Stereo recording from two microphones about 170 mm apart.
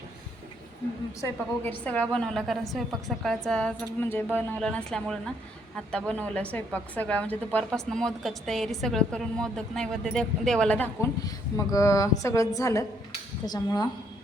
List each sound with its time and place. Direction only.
1.2 s a woman's voice: 10° left (ahead or behind)